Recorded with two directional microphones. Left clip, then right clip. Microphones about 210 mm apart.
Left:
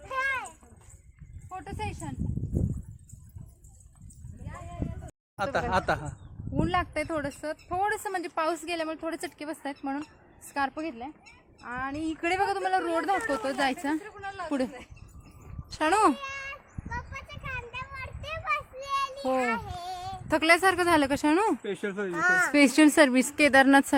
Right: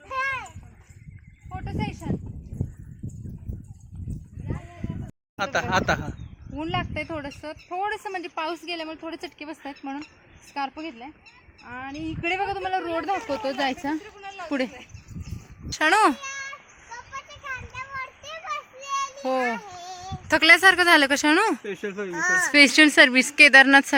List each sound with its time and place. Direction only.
0.1 s children playing: 5° right (ahead or behind)
1.5 s a sound: 20° right (ahead or behind)
5.4 s a man's voice: 5° left (ahead or behind)
13.0 s speech: 20° right (ahead or behind); by 14.0 s 35° right (ahead or behind)
14.0 s a sound: 10° left (ahead or behind)
15.7 s speech: centre (ahead or behind)
16.2 s a sound: 25° left (ahead or behind)
17.1 s children playing: 25° left (ahead or behind)
19.2 s speech: centre (ahead or behind)
19.8 s a sound: 25° left (ahead or behind)
20.2 s speech: 5° left (ahead or behind)
21.6 s speech: 15° left (ahead or behind)
22.1 s speech: 25° left (ahead or behind)
22.4 s speech: 10° left (ahead or behind)